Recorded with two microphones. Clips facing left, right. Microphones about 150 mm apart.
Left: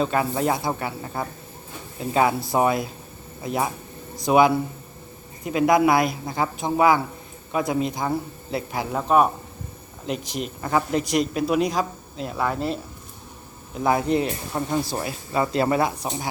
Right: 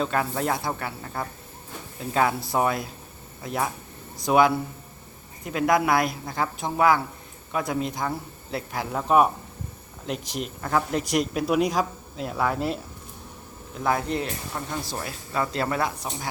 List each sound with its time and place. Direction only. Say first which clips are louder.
0.0 s speech: left 3 dB; 5° left (ahead or behind)
11.1 s speech: left 1 dB; 5° right (ahead or behind)
13.8 s speech: left 5 dB; 10° left (ahead or behind)